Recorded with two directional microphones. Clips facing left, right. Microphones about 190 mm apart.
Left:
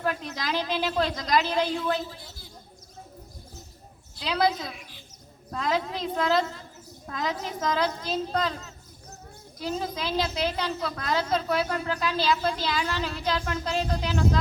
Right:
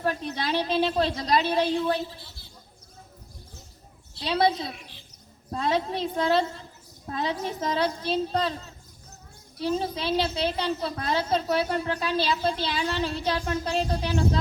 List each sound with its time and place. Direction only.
0.0 s a woman's voice: 35° right (ahead or behind)
4.2 s a woman's voice: 30° right (ahead or behind)